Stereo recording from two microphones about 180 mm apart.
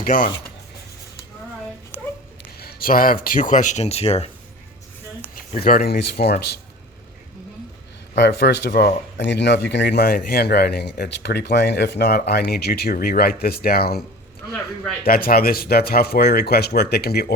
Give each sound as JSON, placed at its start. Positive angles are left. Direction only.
{"t": 0.0, "sound": "speech", "side_deg": 50}
{"t": 2.6, "sound": "speech", "side_deg": 55}
{"t": 5.6, "sound": "speech", "side_deg": 55}
{"t": 8.1, "sound": "speech", "side_deg": 75}
{"t": 15.0, "sound": "speech", "side_deg": 55}